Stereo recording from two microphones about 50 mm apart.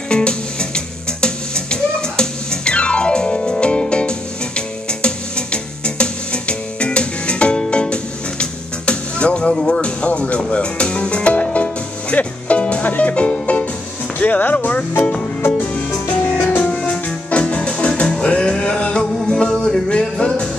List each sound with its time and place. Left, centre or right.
0.1 s music: centre
14.1 s vehicle: left
15.4 s music: left
17.3 s music: left